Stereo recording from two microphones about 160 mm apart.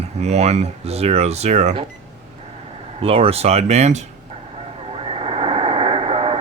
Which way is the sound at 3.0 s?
35° right (ahead or behind).